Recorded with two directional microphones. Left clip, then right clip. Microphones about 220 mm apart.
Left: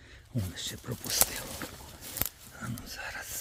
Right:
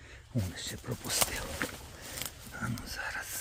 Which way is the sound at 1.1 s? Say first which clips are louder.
Left 1 dB; 5° left (ahead or behind).